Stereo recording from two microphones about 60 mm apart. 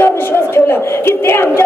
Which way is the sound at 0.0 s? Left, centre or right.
Left.